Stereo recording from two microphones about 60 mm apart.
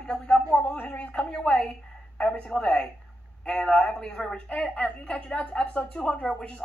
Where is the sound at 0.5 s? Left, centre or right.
Centre.